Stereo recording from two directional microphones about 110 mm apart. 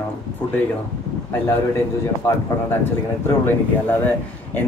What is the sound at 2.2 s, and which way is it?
Speech, 25° left (ahead or behind).